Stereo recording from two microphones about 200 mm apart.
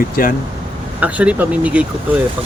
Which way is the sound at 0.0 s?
45° left (ahead or behind).